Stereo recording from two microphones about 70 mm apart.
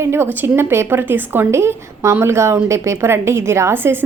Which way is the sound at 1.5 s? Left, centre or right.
Right.